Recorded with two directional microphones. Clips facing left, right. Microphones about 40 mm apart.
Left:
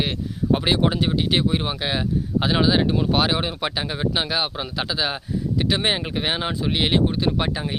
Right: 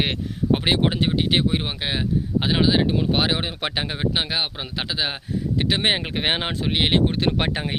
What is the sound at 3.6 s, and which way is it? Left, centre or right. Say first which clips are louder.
Speech: even; right.